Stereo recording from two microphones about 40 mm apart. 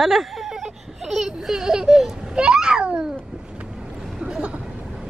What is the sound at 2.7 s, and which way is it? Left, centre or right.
Cat, centre.